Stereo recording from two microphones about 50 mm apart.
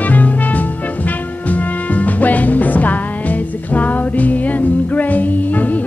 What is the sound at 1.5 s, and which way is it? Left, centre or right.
Music, left.